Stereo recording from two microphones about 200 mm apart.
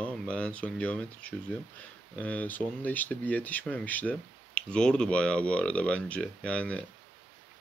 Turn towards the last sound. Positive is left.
turn(degrees=5)  # may be behind; listen again after turning